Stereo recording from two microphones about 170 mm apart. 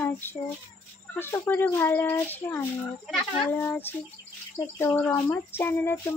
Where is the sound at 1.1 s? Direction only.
15° left (ahead or behind).